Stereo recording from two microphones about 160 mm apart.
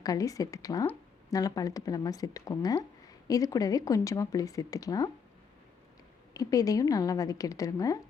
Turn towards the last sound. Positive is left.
turn(degrees=20)  # may be behind; listen again after turning